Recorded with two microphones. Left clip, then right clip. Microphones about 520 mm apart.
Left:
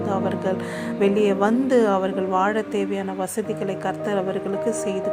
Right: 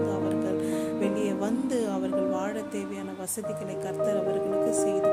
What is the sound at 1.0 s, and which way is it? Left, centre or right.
Speech, right.